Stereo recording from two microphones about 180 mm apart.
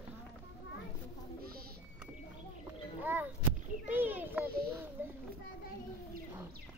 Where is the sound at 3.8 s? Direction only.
10° right (ahead or behind).